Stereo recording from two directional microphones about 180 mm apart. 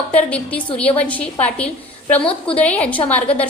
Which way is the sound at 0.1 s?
5° left (ahead or behind).